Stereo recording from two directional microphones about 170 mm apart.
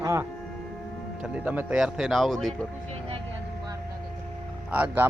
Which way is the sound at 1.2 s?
5° right (ahead or behind).